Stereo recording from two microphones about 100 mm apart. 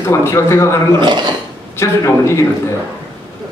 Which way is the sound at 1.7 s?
30° left (ahead or behind).